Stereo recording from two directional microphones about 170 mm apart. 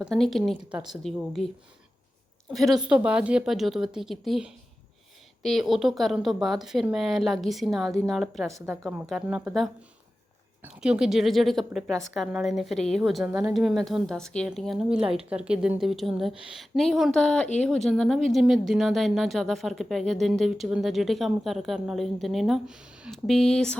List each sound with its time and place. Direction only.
0.0 s speech: centre (ahead or behind)
2.5 s speech: centre (ahead or behind)
8.4 s speech: 15° right (ahead or behind)
8.8 s speech: centre (ahead or behind)
10.8 s speech: 5° right (ahead or behind)